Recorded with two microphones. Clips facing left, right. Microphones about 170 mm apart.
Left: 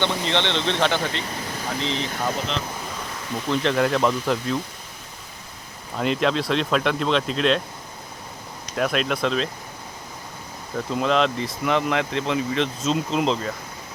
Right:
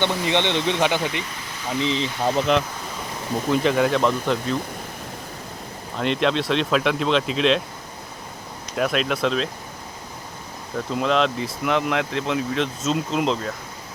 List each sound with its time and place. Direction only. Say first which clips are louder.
0.0 s speech: right 2 dB; 15° right (ahead or behind)
3.5 s speech: right 1 dB; 5° right (ahead or behind)
6.0 s speech: even; centre (ahead or behind)
8.7 s speech: right 1 dB; centre (ahead or behind)
10.8 s speech: even; centre (ahead or behind)